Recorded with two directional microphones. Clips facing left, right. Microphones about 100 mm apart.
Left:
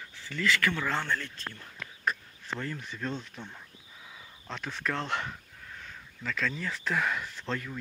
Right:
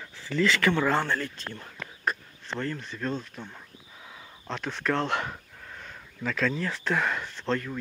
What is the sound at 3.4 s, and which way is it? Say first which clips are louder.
Speech: right 3 dB; 15° right (ahead or behind).